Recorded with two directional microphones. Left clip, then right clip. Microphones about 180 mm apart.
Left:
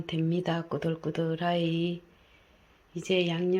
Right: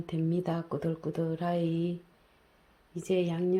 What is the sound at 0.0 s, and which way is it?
Speech, centre (ahead or behind).